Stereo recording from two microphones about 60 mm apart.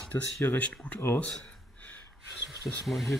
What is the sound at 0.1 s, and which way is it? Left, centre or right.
Speech, left.